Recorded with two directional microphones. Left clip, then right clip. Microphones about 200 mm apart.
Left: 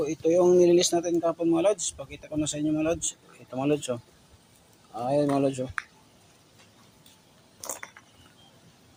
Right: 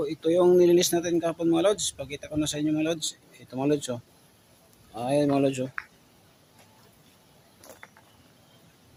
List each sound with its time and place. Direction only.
0.0 s speech: 10° right (ahead or behind)
4.9 s speech: 10° right (ahead or behind)
7.6 s mechanisms: 65° left (ahead or behind)